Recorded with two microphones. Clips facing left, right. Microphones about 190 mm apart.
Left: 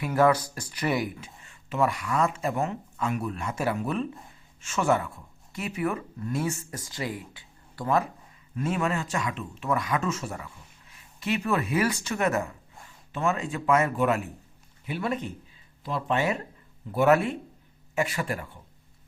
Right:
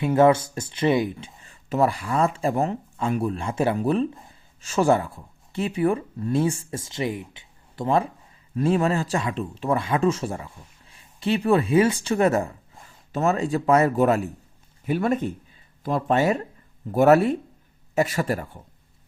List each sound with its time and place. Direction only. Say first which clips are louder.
0.0 s speech: right 5 dB; 25° right (ahead or behind); by 18.6 s 40° right (ahead or behind)